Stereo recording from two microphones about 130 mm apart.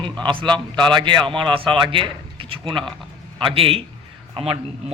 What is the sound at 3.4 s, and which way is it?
Speech, 45° right (ahead or behind).